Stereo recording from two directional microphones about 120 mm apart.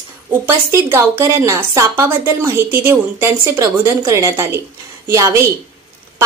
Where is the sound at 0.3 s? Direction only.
20° right (ahead or behind).